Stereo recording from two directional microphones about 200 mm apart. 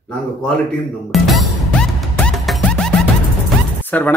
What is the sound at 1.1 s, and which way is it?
Music, centre (ahead or behind).